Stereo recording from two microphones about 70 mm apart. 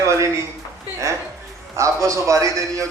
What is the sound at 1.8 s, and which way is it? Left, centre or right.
A man's voice, right.